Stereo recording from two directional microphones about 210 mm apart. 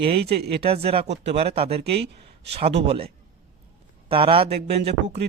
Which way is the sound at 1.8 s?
50° right (ahead or behind).